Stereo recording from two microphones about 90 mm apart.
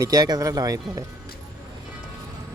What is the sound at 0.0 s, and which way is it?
Speech, 45° right (ahead or behind).